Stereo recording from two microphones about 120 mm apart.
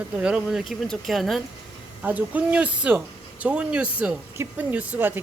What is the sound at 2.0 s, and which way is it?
Speech, 15° right (ahead or behind).